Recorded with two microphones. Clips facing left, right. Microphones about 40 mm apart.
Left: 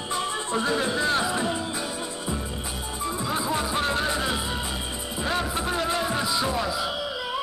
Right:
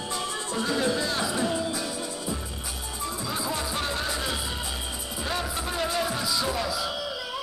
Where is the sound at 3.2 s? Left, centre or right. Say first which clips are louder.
Left 4 dB; left.